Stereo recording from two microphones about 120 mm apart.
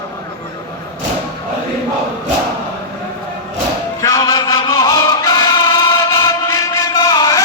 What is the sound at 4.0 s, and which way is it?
Music, 30° left (ahead or behind).